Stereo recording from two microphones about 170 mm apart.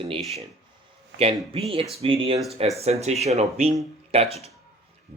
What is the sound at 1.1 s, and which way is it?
A man's voice, 35° right (ahead or behind).